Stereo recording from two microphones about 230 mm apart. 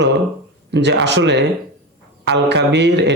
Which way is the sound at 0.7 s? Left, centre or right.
Right.